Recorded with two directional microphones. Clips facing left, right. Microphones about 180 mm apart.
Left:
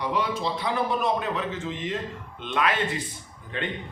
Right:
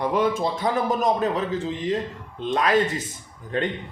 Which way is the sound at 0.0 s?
50° right (ahead or behind).